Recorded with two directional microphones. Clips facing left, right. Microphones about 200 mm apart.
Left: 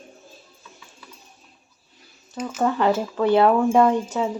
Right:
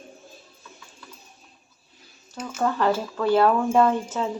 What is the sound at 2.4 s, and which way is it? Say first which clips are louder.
Speech: left 2 dB; 10° left (ahead or behind).